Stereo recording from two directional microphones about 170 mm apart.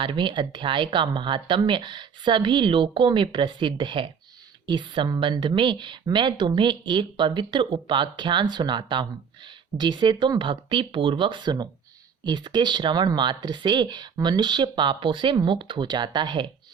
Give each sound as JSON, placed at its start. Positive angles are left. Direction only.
{"t": 0.0, "sound": "a woman's voice", "side_deg": -30}